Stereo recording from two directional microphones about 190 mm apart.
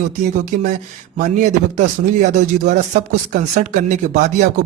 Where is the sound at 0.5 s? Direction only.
40° right (ahead or behind).